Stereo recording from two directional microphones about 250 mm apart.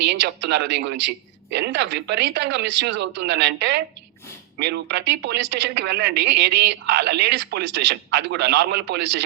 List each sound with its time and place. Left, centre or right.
0.1 s a woman's voice: right